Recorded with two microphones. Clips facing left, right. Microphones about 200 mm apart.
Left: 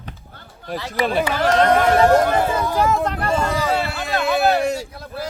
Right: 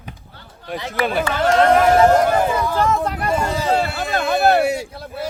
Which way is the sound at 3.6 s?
40° right (ahead or behind).